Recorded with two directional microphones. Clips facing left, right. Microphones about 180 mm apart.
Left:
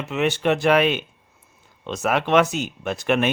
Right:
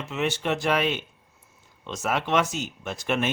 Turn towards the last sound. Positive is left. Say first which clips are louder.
# left 6 dB
turn(degrees=65)  # may be behind; listen again after turning